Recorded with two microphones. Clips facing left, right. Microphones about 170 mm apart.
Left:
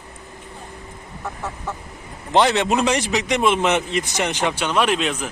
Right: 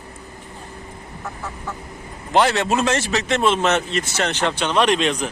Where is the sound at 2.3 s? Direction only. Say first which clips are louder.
Left 1 dB; 20° left (ahead or behind).